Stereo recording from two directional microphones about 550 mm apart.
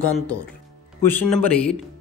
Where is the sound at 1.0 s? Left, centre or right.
Centre.